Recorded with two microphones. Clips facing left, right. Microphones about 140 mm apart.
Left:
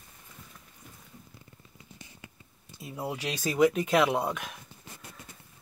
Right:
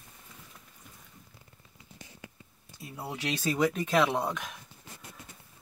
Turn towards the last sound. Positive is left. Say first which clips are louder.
# left 2 dB
turn(degrees=5)  # may be behind; listen again after turning